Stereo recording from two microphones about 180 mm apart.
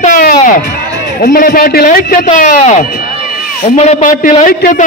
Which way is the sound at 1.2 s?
55° left (ahead or behind).